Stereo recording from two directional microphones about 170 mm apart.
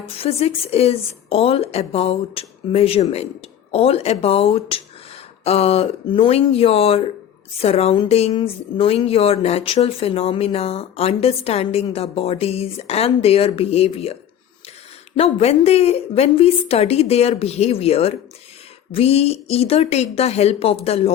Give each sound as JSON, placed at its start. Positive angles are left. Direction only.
{"t": 0.2, "sound": "speech", "side_deg": 35}